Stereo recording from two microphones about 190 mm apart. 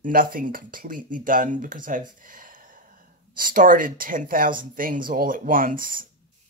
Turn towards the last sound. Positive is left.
turn(degrees=-45)  # may be behind; listen again after turning